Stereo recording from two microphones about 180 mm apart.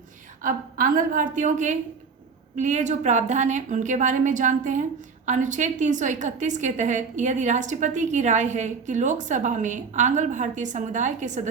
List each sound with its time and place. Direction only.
0.4 s a woman's voice: 50° right (ahead or behind)